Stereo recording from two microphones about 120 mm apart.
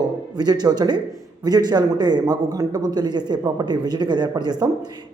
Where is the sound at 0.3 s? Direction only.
35° right (ahead or behind).